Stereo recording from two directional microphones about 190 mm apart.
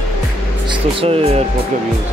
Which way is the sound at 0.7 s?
30° right (ahead or behind).